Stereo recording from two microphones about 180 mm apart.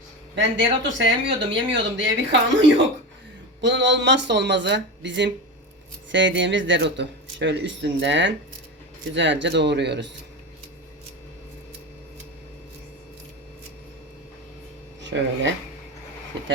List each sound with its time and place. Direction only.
0.3 s speech: 85° right
6.1 s speech: 90° right; by 10.1 s 70° right (ahead or behind)
15.0 s speech: 80° right